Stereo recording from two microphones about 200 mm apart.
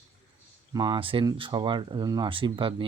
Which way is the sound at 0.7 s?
20° right (ahead or behind).